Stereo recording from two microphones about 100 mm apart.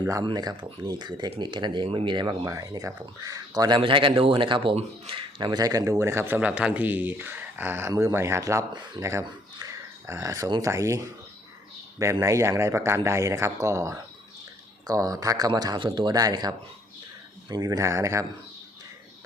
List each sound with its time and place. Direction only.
0.2 s speech: 45° right (ahead or behind)
2.5 s speech: 35° right (ahead or behind)
3.8 s speech: 60° right (ahead or behind); by 5.8 s 40° right (ahead or behind)
5.8 s speech: 25° right (ahead or behind)
9.6 s a sound: 35° right (ahead or behind)
10.6 s speech: 30° right (ahead or behind)